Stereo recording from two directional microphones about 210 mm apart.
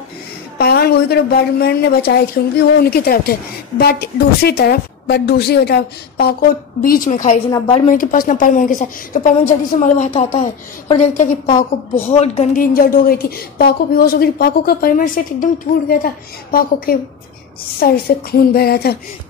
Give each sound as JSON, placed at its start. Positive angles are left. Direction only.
{"t": 0.6, "sound": "a woman's voice", "side_deg": 50}
{"t": 7.5, "sound": "a woman's voice", "side_deg": 25}
{"t": 7.9, "sound": "a woman's voice", "side_deg": 40}
{"t": 12.2, "sound": "a woman's voice", "side_deg": 35}